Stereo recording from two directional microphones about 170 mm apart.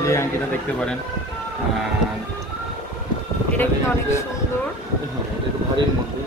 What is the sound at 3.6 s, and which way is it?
Speech, 15° left (ahead or behind).